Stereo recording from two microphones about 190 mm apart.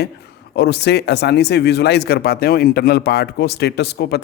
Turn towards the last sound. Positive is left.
turn(degrees=60)  # may be behind; listen again after turning